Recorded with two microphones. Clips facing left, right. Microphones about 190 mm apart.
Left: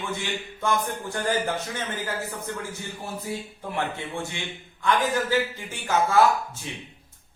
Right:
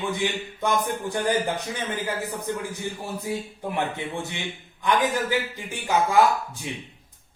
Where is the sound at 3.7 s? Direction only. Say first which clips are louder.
Right 1 dB; 20° right (ahead or behind).